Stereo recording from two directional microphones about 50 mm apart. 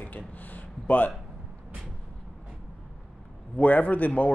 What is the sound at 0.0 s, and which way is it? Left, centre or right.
Speech, left.